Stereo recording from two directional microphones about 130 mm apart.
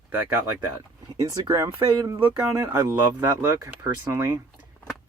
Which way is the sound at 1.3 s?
25° right (ahead or behind).